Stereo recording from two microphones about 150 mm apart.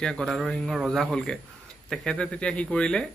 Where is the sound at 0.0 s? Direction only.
5° left (ahead or behind).